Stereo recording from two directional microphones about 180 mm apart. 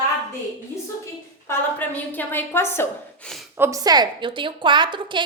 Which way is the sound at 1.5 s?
10° left (ahead or behind).